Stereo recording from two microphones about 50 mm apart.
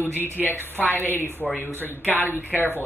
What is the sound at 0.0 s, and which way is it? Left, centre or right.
Speech, left.